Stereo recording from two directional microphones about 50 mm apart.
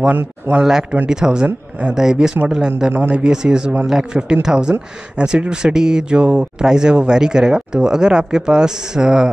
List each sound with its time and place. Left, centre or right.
0.1 s speech: right
0.6 s speech: centre
2.9 s speech: right
3.2 s speech: centre